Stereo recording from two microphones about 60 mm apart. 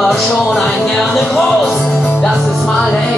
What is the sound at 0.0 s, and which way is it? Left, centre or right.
Music, centre.